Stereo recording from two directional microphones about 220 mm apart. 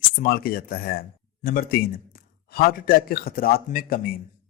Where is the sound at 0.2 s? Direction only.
40° left (ahead or behind).